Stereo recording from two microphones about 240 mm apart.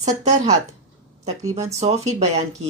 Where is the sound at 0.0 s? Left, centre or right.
Right.